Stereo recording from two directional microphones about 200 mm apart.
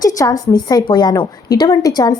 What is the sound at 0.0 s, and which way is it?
A woman's voice, 20° left (ahead or behind).